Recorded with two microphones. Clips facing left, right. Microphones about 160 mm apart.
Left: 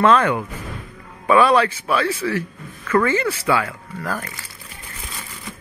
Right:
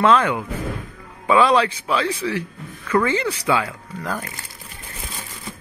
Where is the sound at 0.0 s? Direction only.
10° right (ahead or behind).